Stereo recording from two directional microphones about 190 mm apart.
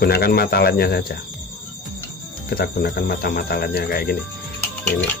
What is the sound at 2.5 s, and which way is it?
Speech, 50° left (ahead or behind).